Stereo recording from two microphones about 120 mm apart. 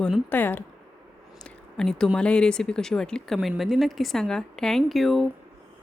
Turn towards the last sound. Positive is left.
turn(degrees=0)  # may be behind; listen again after turning